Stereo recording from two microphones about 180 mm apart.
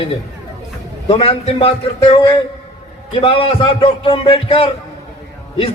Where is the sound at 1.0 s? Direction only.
30° left (ahead or behind).